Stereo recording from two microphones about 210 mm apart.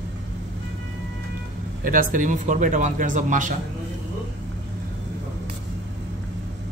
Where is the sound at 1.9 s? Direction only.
40° right (ahead or behind).